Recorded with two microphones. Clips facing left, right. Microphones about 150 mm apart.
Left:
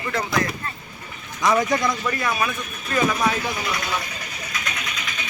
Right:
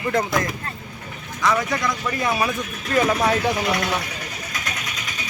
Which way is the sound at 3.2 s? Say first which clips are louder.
Right 4 dB; 70° right (ahead or behind).